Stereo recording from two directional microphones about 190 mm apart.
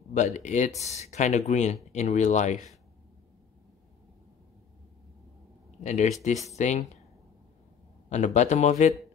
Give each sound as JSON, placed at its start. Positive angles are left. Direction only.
{"t": 0.1, "sound": "speech", "side_deg": 40}
{"t": 5.9, "sound": "speech", "side_deg": 40}
{"t": 8.1, "sound": "speech", "side_deg": 35}